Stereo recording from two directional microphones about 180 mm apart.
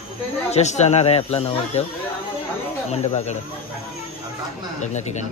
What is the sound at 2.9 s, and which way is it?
Speech, 40° left (ahead or behind).